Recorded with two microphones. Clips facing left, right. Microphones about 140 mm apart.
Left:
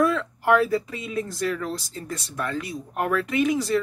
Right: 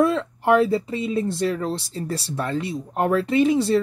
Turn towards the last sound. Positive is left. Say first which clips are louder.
# right 4 dB
turn(degrees=-30)  # may be behind; listen again after turning